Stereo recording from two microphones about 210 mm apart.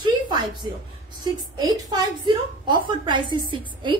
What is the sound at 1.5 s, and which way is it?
A woman's voice, 20° right (ahead or behind).